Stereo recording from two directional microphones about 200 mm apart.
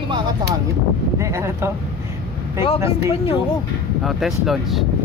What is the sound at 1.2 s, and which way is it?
Speech, 15° right (ahead or behind).